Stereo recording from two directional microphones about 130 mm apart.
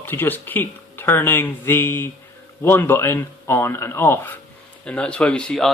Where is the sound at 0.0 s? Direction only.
15° left (ahead or behind).